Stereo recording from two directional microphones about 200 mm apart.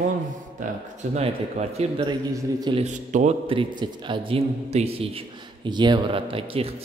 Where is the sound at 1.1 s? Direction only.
30° right (ahead or behind).